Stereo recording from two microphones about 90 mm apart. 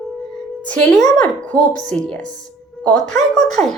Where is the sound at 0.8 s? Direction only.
5° left (ahead or behind).